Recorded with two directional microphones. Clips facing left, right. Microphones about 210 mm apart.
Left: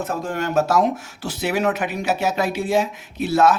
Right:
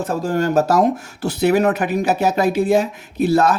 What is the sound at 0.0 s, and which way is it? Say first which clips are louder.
Speech: right 5 dB; 35° right (ahead or behind).